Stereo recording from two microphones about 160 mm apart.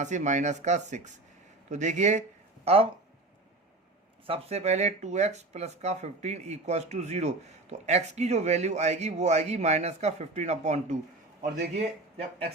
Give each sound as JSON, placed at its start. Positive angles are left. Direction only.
{"t": 0.0, "sound": "speech", "side_deg": -50}
{"t": 2.6, "sound": "speech", "side_deg": -35}
{"t": 4.3, "sound": "speech", "side_deg": -40}